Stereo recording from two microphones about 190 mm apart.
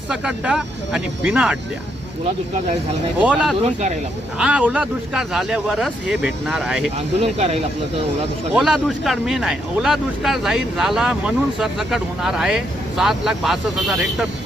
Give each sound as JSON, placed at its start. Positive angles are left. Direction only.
{"t": 0.1, "sound": "speech", "side_deg": -5}
{"t": 3.2, "sound": "speech", "side_deg": -5}
{"t": 3.6, "sound": "speech", "side_deg": -35}
{"t": 4.4, "sound": "speech", "side_deg": -5}
{"t": 7.2, "sound": "speech", "side_deg": -35}
{"t": 8.5, "sound": "speech", "side_deg": 0}